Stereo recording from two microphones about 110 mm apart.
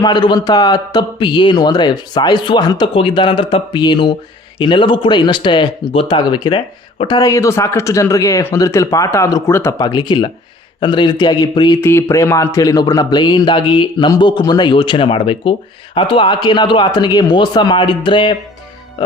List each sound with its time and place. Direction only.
0.0 s a man's voice: 40° left (ahead or behind)
2.9 s speech: 50° left (ahead or behind)
7.2 s speech: 30° left (ahead or behind)
9.7 s a man's voice: 40° left (ahead or behind)
11.8 s a man's voice: 20° left (ahead or behind); by 18.3 s 45° left (ahead or behind)